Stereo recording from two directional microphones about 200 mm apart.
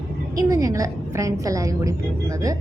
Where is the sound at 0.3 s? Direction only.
15° right (ahead or behind).